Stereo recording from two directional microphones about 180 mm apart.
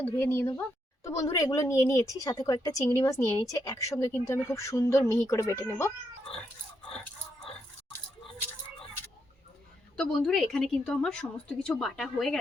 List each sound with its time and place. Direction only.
0.0 s a woman's voice: 10° left (ahead or behind)
6.9 s a sound: 5° left (ahead or behind)
10.0 s a woman's voice: centre (ahead or behind)